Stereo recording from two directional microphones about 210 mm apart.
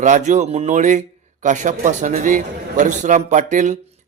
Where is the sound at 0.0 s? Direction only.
35° right (ahead or behind).